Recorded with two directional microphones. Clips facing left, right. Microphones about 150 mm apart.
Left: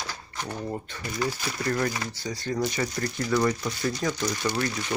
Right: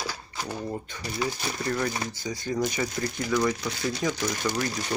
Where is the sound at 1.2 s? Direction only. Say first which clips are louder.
Even; 20° right (ahead or behind).